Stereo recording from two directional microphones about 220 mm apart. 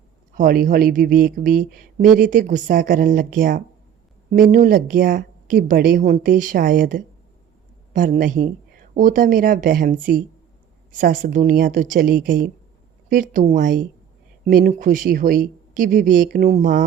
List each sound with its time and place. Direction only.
0.3 s speech: 40° right (ahead or behind)